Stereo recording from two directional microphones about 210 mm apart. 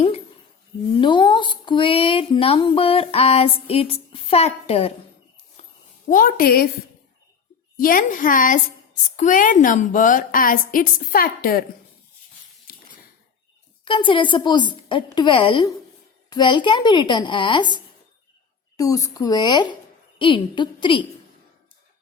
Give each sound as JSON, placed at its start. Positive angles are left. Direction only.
{"t": 0.9, "sound": "speech", "side_deg": 20}
{"t": 6.1, "sound": "a woman's voice", "side_deg": 40}
{"t": 7.8, "sound": "a woman's voice", "side_deg": 40}
{"t": 12.7, "sound": "a sound", "side_deg": 45}
{"t": 13.8, "sound": "speech", "side_deg": 25}
{"t": 18.8, "sound": "speech", "side_deg": 15}